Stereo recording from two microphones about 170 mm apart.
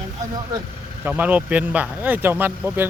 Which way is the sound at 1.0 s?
10° right (ahead or behind).